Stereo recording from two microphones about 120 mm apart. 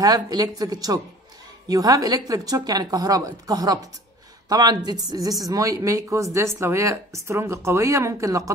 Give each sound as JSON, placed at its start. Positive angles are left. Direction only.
{"t": 0.0, "sound": "a woman's voice", "side_deg": -30}